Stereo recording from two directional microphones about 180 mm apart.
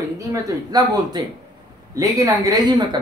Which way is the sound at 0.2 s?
20° right (ahead or behind).